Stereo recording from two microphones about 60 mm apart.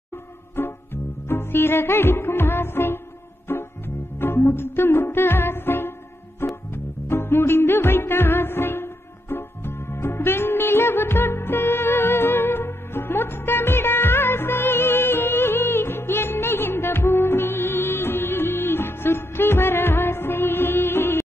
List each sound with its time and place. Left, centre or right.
0.6 s music: left